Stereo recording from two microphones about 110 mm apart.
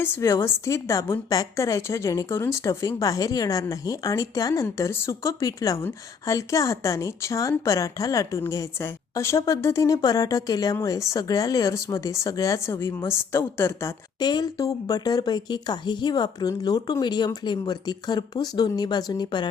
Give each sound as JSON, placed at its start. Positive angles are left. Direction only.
{"t": 0.0, "sound": "a woman's voice", "side_deg": 25}
{"t": 14.2, "sound": "speech", "side_deg": 40}